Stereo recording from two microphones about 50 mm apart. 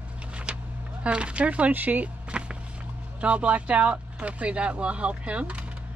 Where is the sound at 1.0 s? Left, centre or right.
Right.